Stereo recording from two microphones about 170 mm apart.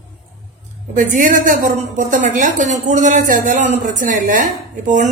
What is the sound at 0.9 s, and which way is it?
A woman's voice, 50° right (ahead or behind).